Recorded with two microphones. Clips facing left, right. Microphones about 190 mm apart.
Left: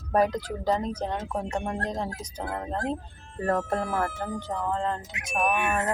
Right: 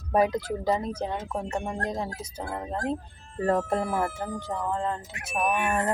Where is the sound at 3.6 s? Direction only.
15° right (ahead or behind).